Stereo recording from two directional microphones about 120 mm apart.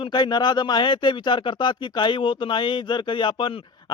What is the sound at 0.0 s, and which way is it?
A man's voice, 40° left (ahead or behind).